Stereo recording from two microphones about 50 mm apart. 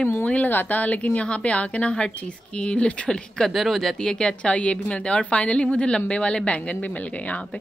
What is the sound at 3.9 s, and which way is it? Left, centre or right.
A woman's voice, centre.